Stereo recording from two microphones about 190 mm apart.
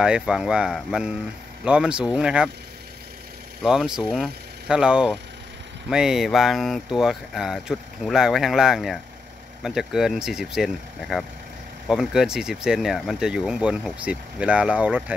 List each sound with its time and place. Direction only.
0.0 s speech: 5° right (ahead or behind)
3.6 s speech: 5° right (ahead or behind)